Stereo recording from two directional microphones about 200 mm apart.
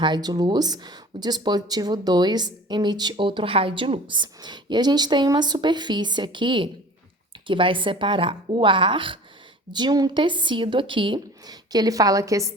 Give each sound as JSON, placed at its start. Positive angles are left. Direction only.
{"t": 0.0, "sound": "speech", "side_deg": -20}